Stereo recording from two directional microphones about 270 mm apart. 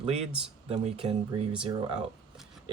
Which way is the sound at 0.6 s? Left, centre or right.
Right.